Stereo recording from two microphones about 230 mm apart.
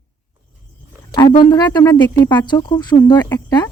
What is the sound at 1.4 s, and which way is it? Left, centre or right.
Speech, centre.